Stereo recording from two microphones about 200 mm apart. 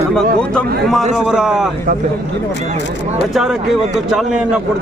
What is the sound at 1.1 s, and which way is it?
Speech, 5° right (ahead or behind).